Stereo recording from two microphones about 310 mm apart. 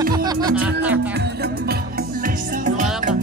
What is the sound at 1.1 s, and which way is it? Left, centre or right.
Music, right.